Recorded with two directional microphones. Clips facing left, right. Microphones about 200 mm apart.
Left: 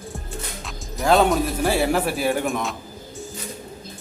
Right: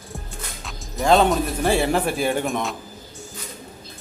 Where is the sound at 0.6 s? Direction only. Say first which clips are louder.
Right 1 dB; centre (ahead or behind).